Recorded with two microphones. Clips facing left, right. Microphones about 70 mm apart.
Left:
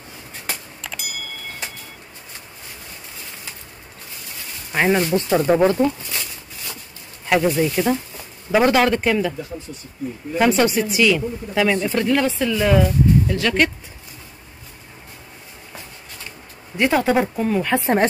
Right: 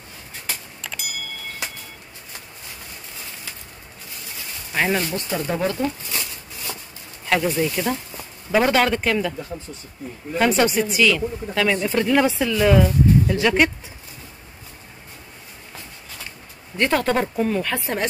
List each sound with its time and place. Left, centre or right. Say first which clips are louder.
0.8 s a sound: even; centre
4.7 s speech: left 4 dB; centre
5.4 s speech: left 7 dB; left
7.2 s speech: left 3 dB; centre
10.3 s speech: left 1 dB; centre
12.2 s speech: right 1 dB; centre
12.4 s speech: even; centre
13.3 s speech: right 1 dB; centre
16.7 s speech: left 3 dB; centre
17.7 s speech: left 8 dB; left